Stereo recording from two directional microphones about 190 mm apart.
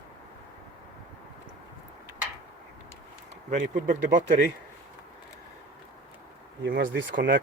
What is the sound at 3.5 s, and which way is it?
Speech, 40° right (ahead or behind).